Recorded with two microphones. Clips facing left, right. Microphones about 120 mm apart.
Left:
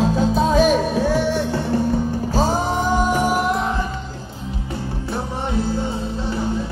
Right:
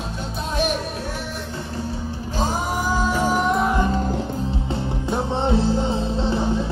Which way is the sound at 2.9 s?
15° left (ahead or behind).